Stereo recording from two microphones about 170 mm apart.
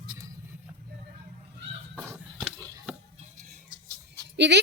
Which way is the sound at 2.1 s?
5° left (ahead or behind).